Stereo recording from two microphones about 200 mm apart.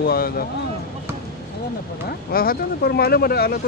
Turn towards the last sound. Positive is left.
turn(degrees=50)  # may be behind; listen again after turning